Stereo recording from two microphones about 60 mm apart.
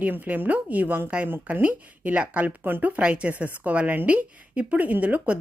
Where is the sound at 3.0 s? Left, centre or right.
Centre.